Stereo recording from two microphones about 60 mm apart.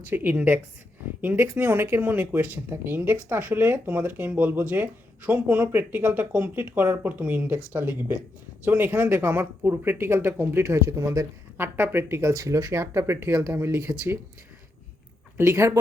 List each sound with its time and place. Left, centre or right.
0.0 s speech: right
11.5 s speech: right
12.0 s speech: right
12.7 s speech: right
15.4 s speech: right